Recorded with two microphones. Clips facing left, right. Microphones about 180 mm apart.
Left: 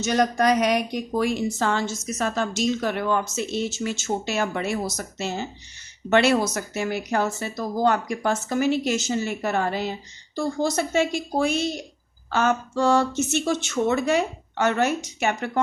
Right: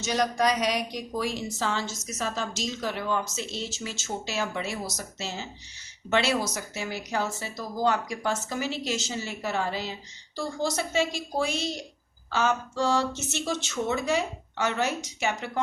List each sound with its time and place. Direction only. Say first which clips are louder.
0.0 s a woman's voice: left 4 dB; 55° left (ahead or behind)